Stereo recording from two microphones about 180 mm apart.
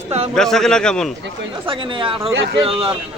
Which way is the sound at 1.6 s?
30° right (ahead or behind).